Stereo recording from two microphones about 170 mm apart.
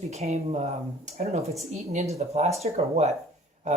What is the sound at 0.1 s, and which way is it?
Speech, 40° right (ahead or behind).